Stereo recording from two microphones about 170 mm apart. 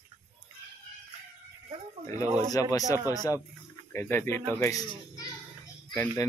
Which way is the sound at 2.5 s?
20° left (ahead or behind).